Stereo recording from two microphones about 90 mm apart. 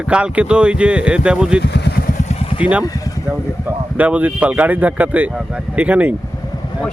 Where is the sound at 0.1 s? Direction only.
10° right (ahead or behind).